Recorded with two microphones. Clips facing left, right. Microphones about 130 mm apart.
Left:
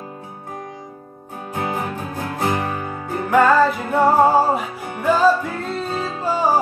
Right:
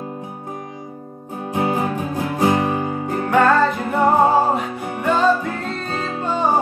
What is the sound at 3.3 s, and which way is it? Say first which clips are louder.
Music: left 1 dB; 5° left (ahead or behind).